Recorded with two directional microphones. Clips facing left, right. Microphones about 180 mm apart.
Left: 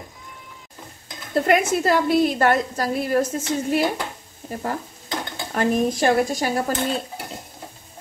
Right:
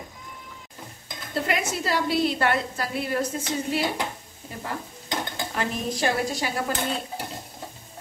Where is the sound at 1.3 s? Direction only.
50° left (ahead or behind).